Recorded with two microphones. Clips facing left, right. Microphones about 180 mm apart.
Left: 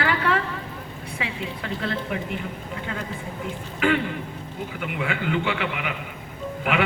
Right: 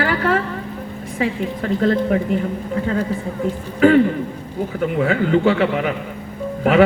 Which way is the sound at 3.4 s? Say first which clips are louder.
Right 10 dB; 40° right (ahead or behind).